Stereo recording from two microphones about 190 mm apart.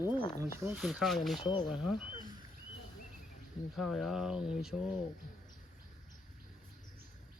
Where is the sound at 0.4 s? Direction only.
15° right (ahead or behind).